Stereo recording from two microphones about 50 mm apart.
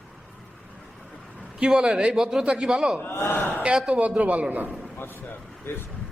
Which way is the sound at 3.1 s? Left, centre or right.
Left.